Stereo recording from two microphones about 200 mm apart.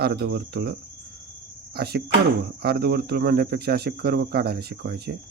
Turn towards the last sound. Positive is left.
turn(degrees=-55)  # may be behind; listen again after turning